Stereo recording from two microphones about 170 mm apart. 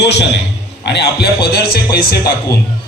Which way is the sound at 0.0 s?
90° left.